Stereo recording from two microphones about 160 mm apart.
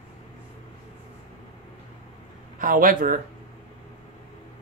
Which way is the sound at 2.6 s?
60° right (ahead or behind).